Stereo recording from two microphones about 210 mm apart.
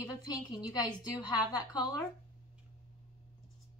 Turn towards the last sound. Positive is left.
turn(degrees=20)  # may be behind; listen again after turning